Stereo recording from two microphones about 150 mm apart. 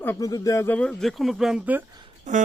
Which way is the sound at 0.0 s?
20° left (ahead or behind).